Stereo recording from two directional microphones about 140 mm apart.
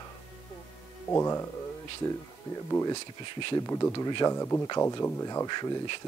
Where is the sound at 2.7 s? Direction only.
20° left (ahead or behind).